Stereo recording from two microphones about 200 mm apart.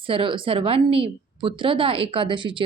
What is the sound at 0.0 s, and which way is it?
A woman's voice, 25° right (ahead or behind).